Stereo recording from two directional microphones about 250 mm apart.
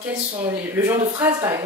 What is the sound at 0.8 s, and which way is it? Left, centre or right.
Speech, centre.